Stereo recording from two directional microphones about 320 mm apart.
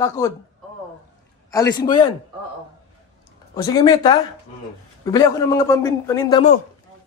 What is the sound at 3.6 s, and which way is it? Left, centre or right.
A man's voice, centre.